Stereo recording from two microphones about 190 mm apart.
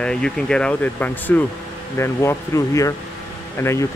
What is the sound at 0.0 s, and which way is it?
Speech, 5° left (ahead or behind).